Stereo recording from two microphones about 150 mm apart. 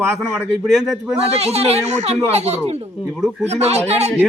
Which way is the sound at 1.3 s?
45° right (ahead or behind).